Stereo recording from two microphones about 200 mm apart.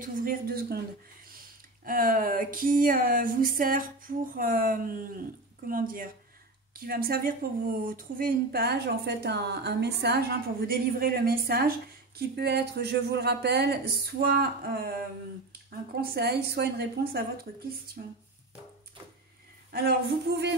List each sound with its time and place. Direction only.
0.0 s speech: 45° right (ahead or behind)
1.9 s speech: 45° right (ahead or behind)
16.0 s speech: 55° right (ahead or behind)